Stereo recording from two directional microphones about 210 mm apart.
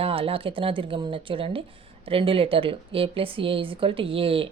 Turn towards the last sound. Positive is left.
turn(degrees=-25)  # may be behind; listen again after turning